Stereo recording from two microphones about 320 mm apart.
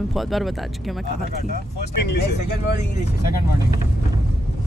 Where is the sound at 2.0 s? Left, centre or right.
Left.